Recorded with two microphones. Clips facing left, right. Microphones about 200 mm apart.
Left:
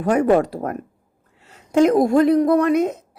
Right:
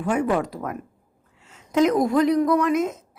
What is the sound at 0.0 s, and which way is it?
Speech, 40° left (ahead or behind).